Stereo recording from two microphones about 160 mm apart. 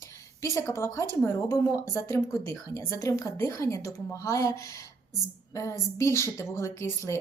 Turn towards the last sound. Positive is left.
turn(degrees=15)  # may be behind; listen again after turning